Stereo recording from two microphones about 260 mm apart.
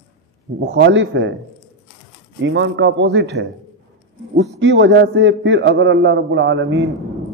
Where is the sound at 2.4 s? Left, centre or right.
Right.